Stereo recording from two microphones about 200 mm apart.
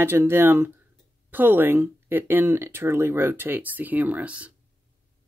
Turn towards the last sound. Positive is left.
turn(degrees=-5)  # may be behind; listen again after turning